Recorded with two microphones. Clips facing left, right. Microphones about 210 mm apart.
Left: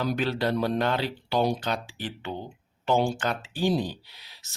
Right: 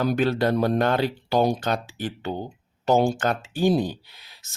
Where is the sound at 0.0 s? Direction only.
50° right (ahead or behind).